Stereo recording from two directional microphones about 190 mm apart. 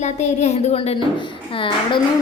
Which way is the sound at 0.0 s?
35° left (ahead or behind).